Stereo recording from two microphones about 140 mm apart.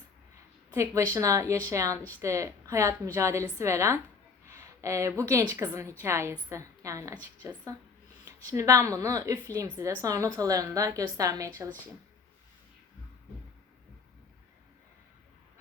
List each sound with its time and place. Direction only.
0.7 s a woman's voice: 20° right (ahead or behind)